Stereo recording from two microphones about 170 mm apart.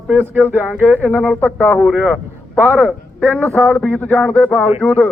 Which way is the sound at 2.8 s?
5° left (ahead or behind).